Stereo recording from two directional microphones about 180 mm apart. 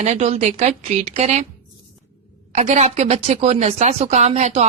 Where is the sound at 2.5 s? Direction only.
40° right (ahead or behind).